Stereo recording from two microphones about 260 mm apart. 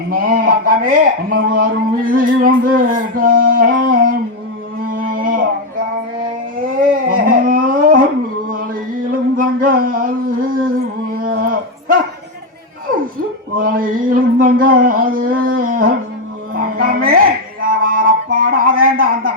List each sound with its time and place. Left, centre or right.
0.1 s a sound: right
6.6 s dog: right
8.4 s mantra: right
13.6 s a sound: right
16.6 s dog: right
17.8 s music: right